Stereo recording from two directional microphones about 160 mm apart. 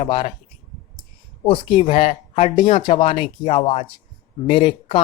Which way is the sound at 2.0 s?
50° left (ahead or behind).